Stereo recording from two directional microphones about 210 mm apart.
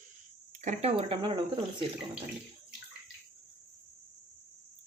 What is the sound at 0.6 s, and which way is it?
Speech, 30° right (ahead or behind).